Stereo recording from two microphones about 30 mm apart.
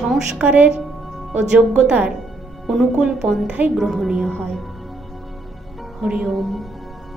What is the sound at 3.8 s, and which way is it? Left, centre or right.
Speech, centre.